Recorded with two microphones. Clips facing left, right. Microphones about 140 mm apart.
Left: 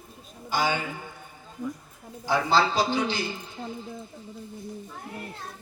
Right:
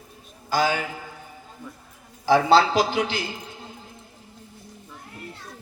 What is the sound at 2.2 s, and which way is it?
A man's voice, 90° right.